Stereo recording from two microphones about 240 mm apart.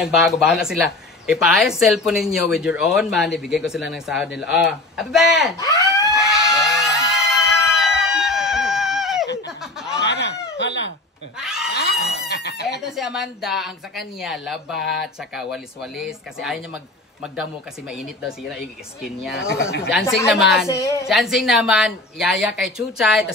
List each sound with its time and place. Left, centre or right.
0.0 s speech: centre
5.6 s speech: centre
6.3 s a sound: centre
10.0 s a sound: left
11.3 s a sound: centre
12.3 s chicken: left
12.9 s speech: centre
19.3 s speech: left
19.9 s speech: centre
20.6 s a woman's voice: centre
21.1 s speech: centre